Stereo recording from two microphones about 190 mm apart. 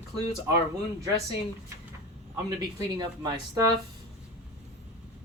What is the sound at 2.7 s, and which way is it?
Speech, 20° right (ahead or behind).